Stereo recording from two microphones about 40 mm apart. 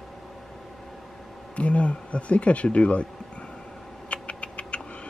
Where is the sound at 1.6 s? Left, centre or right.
Left.